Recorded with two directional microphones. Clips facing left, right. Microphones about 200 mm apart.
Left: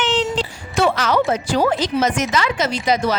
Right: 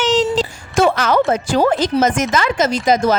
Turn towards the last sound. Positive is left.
turn(degrees=-45)  # may be behind; listen again after turning